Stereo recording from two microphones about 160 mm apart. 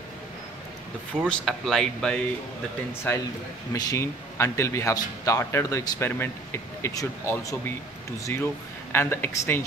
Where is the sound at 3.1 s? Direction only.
15° left (ahead or behind).